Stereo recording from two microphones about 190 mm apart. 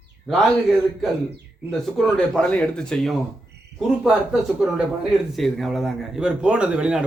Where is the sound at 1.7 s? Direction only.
Centre (ahead or behind).